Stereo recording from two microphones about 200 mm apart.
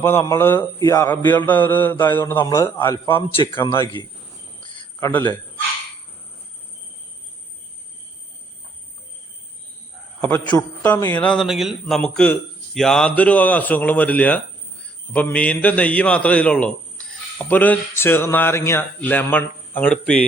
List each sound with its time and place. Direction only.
0.0 s a man's voice: 15° left (ahead or behind)
3.2 s a man's voice: 25° left (ahead or behind)
4.6 s cricket: 20° left (ahead or behind)
10.2 s a man's voice: 10° left (ahead or behind)